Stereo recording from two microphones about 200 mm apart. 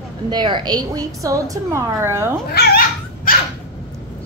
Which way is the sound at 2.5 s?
50° left (ahead or behind).